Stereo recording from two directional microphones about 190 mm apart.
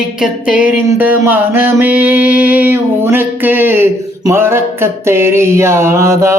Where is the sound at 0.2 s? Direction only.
5° right (ahead or behind).